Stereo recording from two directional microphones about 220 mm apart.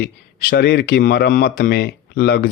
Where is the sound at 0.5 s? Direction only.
45° left (ahead or behind).